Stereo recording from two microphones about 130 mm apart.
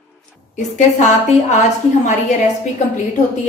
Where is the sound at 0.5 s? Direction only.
65° left (ahead or behind).